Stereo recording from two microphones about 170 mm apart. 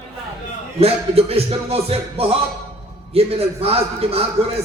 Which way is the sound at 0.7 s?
35° right (ahead or behind).